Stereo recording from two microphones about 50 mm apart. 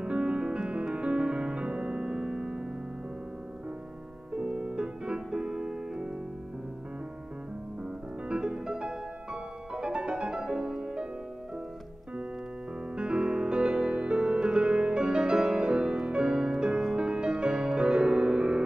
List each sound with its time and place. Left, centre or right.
0.0 s music: right
4.3 s piano: centre
8.3 s music: centre
12.9 s music: centre